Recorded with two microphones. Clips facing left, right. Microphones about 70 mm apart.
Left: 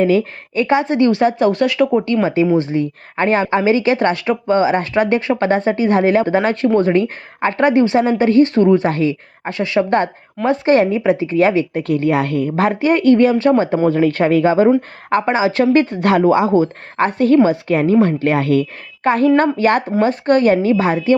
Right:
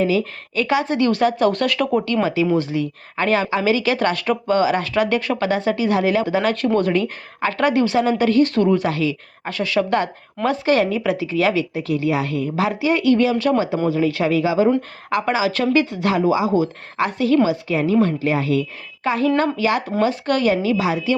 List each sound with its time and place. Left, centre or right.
0.0 s speech: left
2.2 s speech: left
9.4 s speech: left
11.8 s a woman's voice: left
15.7 s a woman's voice: left